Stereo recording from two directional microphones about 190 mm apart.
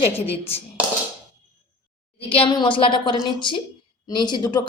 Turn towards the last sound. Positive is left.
turn(degrees=20)  # may be behind; listen again after turning